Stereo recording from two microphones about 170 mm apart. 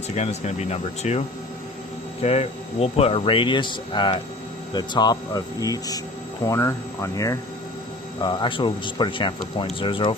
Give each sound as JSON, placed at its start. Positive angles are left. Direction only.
{"t": 0.2, "sound": "speech", "side_deg": 40}
{"t": 2.2, "sound": "speech", "side_deg": 40}
{"t": 8.2, "sound": "speech", "side_deg": 30}